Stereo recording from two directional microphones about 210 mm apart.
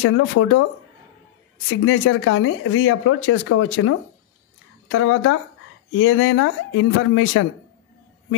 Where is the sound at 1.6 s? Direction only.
65° left (ahead or behind).